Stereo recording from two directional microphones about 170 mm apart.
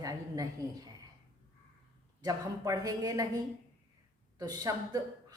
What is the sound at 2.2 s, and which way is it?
A woman's voice, 20° right (ahead or behind).